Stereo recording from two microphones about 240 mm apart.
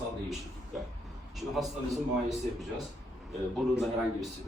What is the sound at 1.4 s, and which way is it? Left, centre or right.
Speech, centre.